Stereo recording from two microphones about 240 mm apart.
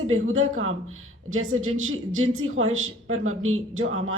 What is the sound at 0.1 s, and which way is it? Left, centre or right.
A woman's voice, right.